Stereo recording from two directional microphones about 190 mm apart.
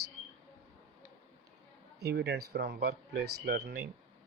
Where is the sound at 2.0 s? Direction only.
60° right (ahead or behind).